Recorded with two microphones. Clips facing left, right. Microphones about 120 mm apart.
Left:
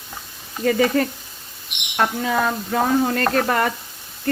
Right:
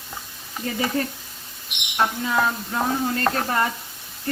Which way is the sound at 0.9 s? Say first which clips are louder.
Left 5 dB; 75° left (ahead or behind).